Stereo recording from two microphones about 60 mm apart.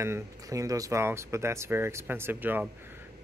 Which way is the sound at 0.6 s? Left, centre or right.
Right.